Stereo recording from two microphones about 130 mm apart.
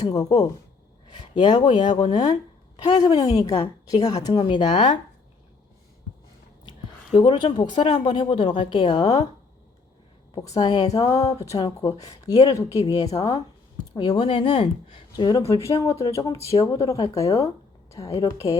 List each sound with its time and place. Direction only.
0.0 s speech: 30° left (ahead or behind)
1.0 s a sound: 35° left (ahead or behind)
1.4 s speech: 35° left (ahead or behind)
6.7 s speech: 40° left (ahead or behind)
10.6 s speech: 30° left (ahead or behind)
13.9 s speech: 35° left (ahead or behind)